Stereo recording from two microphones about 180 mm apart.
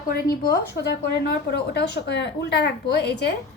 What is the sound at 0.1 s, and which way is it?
A woman's voice, 60° left (ahead or behind).